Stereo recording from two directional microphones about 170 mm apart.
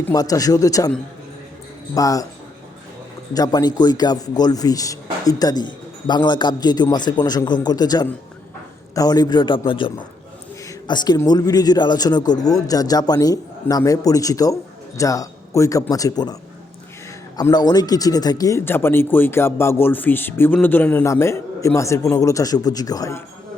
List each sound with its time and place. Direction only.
0.0 s speech: 20° left (ahead or behind)
2.0 s speech: 20° left (ahead or behind)
3.3 s speech: 20° left (ahead or behind)